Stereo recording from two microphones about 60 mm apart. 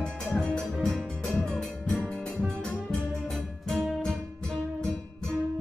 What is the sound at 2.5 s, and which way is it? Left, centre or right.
Music, centre.